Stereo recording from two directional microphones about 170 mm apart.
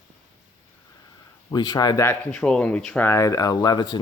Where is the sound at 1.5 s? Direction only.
25° left (ahead or behind).